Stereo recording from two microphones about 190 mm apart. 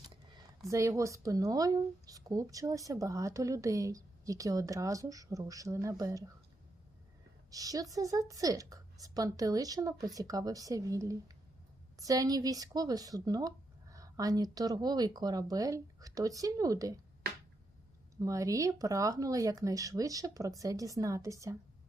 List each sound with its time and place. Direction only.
0.7 s speech: 15° right (ahead or behind)
7.5 s speech: 20° right (ahead or behind)
18.2 s speech: 15° right (ahead or behind)